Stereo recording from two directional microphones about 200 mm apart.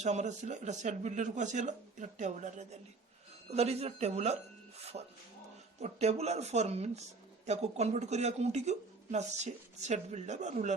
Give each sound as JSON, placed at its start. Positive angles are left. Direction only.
{"t": 0.0, "sound": "speech", "side_deg": -35}